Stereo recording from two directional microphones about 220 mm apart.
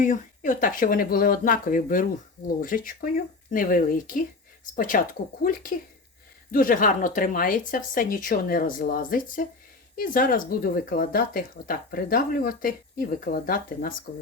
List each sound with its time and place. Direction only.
0.0 s speech: 35° left (ahead or behind)